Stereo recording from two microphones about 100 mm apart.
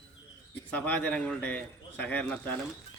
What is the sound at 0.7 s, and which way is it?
A man's voice, 10° left (ahead or behind).